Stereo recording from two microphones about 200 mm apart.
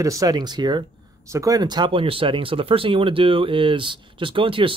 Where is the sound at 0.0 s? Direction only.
15° right (ahead or behind).